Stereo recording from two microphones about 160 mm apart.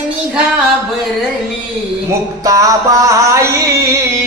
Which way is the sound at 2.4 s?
20° right (ahead or behind).